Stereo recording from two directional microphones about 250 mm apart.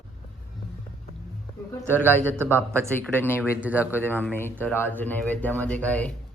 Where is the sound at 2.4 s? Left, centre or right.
Centre.